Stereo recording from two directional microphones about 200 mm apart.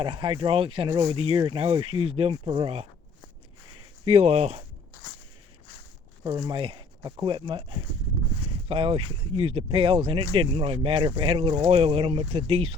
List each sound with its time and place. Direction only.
0.0 s speech: 25° right (ahead or behind)
4.0 s speech: 30° right (ahead or behind)
6.2 s speech: 20° right (ahead or behind)